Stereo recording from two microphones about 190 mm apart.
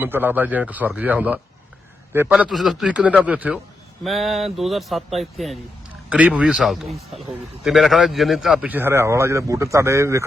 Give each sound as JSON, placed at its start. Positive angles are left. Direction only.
{"t": 0.0, "sound": "a man's voice", "side_deg": -10}